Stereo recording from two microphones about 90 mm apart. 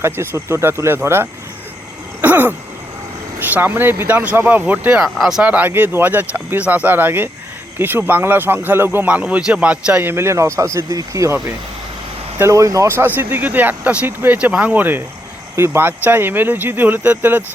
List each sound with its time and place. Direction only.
0.0 s speech: 30° right (ahead or behind)
5.0 s speech: centre (ahead or behind)
5.4 s speech: 15° right (ahead or behind)
10.1 s speech: 30° right (ahead or behind)
12.4 s speech: 35° right (ahead or behind)
13.1 s speech: 20° right (ahead or behind)